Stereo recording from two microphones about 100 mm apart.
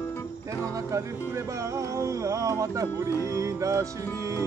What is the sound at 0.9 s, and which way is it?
Music, 30° right (ahead or behind).